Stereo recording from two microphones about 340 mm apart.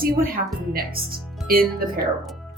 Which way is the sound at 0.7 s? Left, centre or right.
Right.